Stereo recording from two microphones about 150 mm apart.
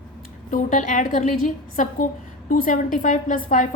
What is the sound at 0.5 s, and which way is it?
A woman's voice, 60° left (ahead or behind).